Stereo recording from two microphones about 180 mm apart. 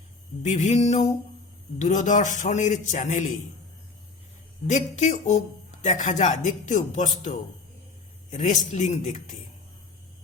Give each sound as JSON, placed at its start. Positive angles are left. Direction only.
{"t": 0.4, "sound": "a man's voice", "side_deg": 40}
{"t": 4.6, "sound": "a man's voice", "side_deg": 40}